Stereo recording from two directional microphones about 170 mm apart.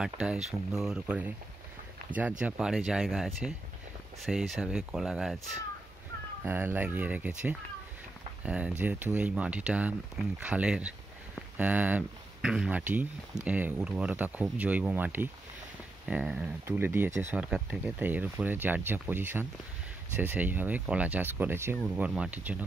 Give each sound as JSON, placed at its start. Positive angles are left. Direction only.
{"t": 0.0, "sound": "speech", "side_deg": -5}
{"t": 2.1, "sound": "speech", "side_deg": -25}
{"t": 2.4, "sound": "speech", "side_deg": -5}
{"t": 6.4, "sound": "speech", "side_deg": -10}